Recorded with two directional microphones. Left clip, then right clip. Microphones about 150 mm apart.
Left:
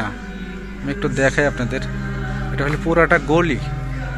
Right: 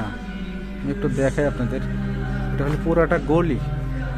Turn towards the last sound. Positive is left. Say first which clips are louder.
# left 4 dB
turn(degrees=-5)  # may be behind; listen again after turning